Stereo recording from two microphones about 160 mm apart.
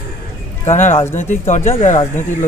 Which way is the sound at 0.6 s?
50° left (ahead or behind).